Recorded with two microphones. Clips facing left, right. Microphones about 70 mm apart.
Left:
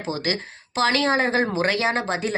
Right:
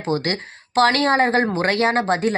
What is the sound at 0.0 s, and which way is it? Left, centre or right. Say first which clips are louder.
Speech: right 4 dB; right.